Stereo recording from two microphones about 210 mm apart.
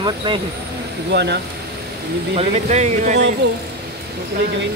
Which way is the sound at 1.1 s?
55° right (ahead or behind).